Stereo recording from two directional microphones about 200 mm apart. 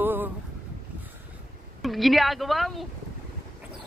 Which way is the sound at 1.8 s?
Centre (ahead or behind).